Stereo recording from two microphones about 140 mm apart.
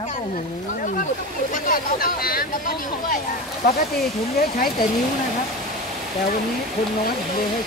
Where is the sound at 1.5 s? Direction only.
85° left.